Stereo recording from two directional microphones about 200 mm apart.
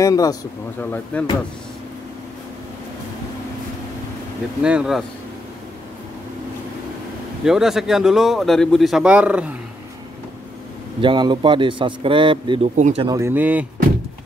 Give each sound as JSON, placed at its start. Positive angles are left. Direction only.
{"t": 0.0, "sound": "speech", "side_deg": 15}
{"t": 1.1, "sound": "speech", "side_deg": 5}
{"t": 4.6, "sound": "speech", "side_deg": -5}
{"t": 7.4, "sound": "speech", "side_deg": 0}
{"t": 11.0, "sound": "a man's voice", "side_deg": -25}
{"t": 13.1, "sound": "speech", "side_deg": -10}